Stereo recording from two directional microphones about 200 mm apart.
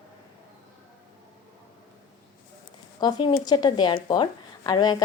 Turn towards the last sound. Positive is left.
turn(degrees=20)  # may be behind; listen again after turning